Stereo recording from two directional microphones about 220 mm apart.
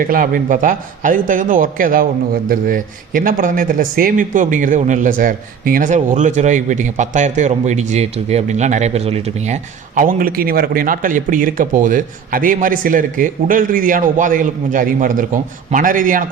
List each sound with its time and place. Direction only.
0.0 s a man's voice: 40° right (ahead or behind)